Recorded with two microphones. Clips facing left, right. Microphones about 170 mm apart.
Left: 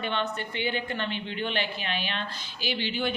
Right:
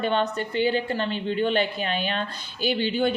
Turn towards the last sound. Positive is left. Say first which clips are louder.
# right 6 dB
turn(degrees=-45)  # may be behind; listen again after turning